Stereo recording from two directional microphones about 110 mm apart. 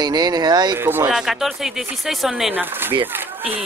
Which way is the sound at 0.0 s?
40° right (ahead or behind).